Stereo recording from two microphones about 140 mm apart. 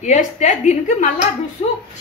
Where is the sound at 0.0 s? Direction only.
60° left (ahead or behind).